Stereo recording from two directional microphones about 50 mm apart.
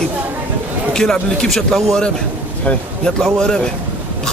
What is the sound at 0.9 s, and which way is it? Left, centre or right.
Speech, centre.